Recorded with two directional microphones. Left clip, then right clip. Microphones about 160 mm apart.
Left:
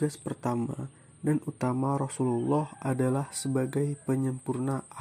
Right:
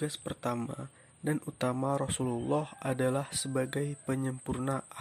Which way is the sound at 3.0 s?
45° right (ahead or behind).